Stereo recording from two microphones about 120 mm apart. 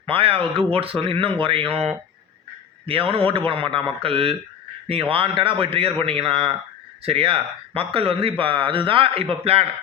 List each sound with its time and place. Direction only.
0.0 s a man's voice: 50° right (ahead or behind)